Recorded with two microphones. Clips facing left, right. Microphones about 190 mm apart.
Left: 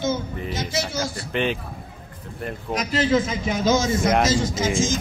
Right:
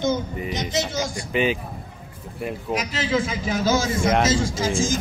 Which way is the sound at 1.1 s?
10° right (ahead or behind).